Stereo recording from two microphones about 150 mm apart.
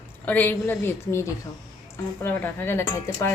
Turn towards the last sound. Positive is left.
turn(degrees=15)  # may be behind; listen again after turning